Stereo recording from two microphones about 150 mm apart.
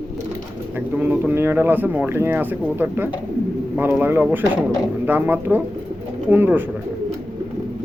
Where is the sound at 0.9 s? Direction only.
10° right (ahead or behind).